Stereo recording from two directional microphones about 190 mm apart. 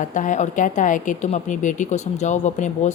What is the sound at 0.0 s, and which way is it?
Speech, 40° left (ahead or behind).